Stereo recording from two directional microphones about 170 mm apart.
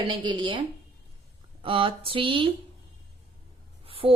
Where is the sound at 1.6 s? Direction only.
30° right (ahead or behind).